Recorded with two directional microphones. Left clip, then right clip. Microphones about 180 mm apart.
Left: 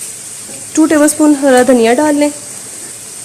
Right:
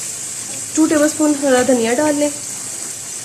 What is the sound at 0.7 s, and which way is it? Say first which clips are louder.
Speech: left 5 dB; 30° left (ahead or behind).